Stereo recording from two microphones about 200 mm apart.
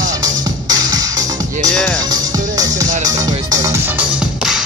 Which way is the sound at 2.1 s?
20° right (ahead or behind).